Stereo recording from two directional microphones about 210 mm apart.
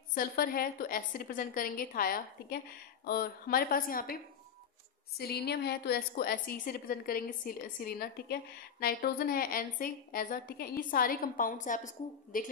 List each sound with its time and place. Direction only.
0.1 s a woman's voice: 45° left (ahead or behind)